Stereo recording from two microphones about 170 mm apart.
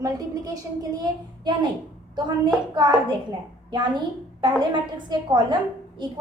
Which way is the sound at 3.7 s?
25° right (ahead or behind).